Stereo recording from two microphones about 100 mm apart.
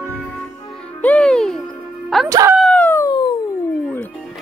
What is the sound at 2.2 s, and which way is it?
Music, 35° right (ahead or behind).